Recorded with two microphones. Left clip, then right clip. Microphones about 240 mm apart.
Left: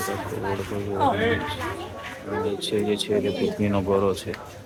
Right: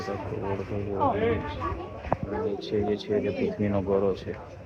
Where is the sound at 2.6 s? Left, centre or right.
Centre.